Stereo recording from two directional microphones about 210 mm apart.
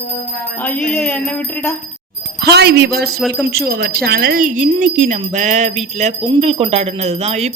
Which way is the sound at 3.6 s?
50° right (ahead or behind).